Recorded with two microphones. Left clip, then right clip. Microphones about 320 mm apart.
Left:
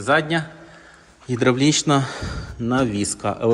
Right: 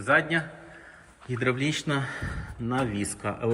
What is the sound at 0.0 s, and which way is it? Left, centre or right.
A man's voice, centre.